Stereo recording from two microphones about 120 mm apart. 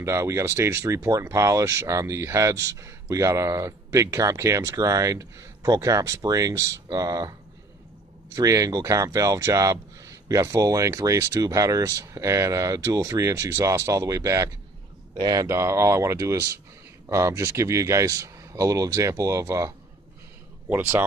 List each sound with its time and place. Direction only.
0.0 s speech: 25° right (ahead or behind)